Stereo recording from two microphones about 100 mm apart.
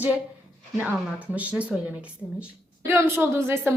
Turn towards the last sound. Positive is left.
turn(degrees=-25)  # may be behind; listen again after turning